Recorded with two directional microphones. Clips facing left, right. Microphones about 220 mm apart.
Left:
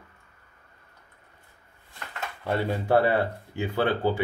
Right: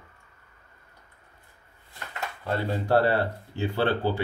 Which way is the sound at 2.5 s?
15° left (ahead or behind).